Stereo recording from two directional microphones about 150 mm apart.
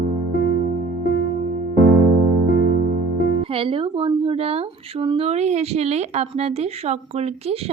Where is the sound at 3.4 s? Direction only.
40° right (ahead or behind).